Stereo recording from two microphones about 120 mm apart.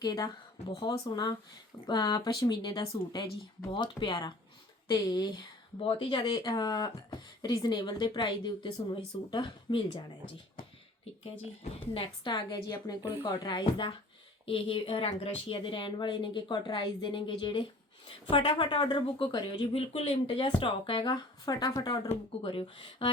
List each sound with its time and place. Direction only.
0.0 s speech: 35° left (ahead or behind)
5.8 s speech: 45° left (ahead or behind)
11.2 s a woman's voice: 60° left (ahead or behind)
12.2 s a woman's voice: 40° left (ahead or behind)
22.1 s a woman's voice: 45° left (ahead or behind)